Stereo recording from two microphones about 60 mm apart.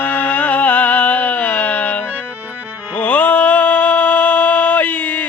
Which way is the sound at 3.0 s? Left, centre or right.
Left.